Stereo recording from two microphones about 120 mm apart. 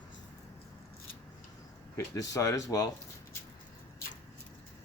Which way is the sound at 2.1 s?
30° left (ahead or behind).